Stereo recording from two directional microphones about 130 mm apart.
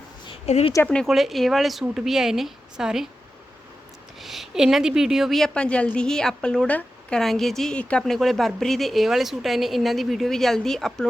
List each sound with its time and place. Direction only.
0.4 s speech: 60° left (ahead or behind)
0.9 s a woman's voice: 5° left (ahead or behind)
4.2 s a woman's voice: centre (ahead or behind)